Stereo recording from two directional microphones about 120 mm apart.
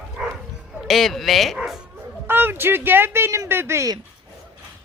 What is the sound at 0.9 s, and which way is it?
Speech, centre (ahead or behind).